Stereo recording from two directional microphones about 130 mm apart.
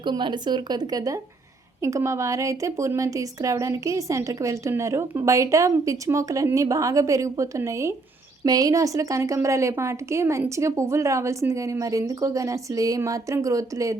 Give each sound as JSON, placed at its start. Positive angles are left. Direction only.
{"t": 0.0, "sound": "a woman's voice", "side_deg": -35}